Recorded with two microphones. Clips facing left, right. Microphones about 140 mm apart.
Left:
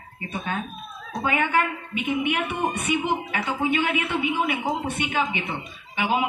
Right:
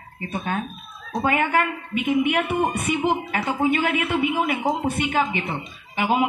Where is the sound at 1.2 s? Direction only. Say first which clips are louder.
Right 2 dB; 40° right (ahead or behind).